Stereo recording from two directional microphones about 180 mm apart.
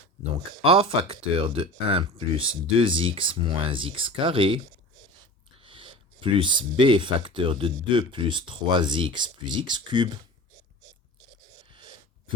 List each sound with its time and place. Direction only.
0.3 s speech: 30° right (ahead or behind)
5.6 s speech: 30° right (ahead or behind)
11.7 s a sound: 25° right (ahead or behind)